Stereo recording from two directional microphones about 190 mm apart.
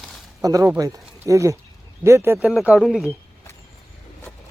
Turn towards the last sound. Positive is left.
turn(degrees=0)  # may be behind; listen again after turning